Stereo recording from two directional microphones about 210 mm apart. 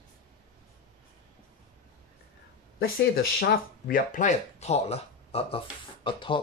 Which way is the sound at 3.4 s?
45° left (ahead or behind).